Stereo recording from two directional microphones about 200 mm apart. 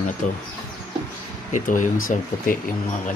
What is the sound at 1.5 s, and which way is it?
Speech, 40° left (ahead or behind).